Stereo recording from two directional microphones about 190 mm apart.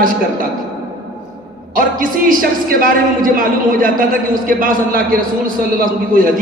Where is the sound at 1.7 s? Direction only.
45° right (ahead or behind).